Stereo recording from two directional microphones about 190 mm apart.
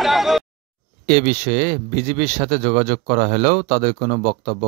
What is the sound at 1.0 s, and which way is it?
A man's voice, 40° right (ahead or behind).